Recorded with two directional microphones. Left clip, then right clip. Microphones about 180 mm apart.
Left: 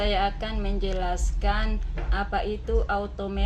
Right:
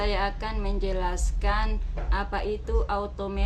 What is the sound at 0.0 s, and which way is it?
Speech, 15° right (ahead or behind).